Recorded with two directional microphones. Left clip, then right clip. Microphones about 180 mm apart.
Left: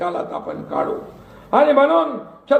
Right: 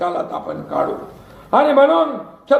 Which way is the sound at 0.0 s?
20° right (ahead or behind).